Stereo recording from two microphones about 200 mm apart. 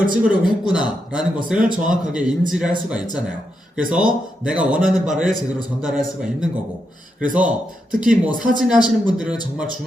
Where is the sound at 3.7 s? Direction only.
5° right (ahead or behind).